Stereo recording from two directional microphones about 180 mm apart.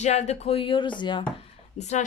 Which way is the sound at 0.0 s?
40° left (ahead or behind).